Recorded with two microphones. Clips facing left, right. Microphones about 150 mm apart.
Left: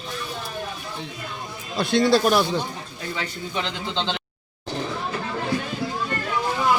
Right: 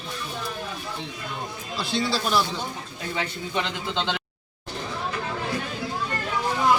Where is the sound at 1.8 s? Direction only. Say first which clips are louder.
Left 8 dB; 55° left (ahead or behind).